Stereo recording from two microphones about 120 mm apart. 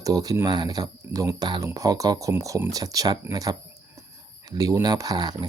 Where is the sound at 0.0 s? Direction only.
30° right (ahead or behind).